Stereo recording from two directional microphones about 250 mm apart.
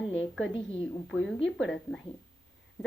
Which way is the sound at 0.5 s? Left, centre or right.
Left.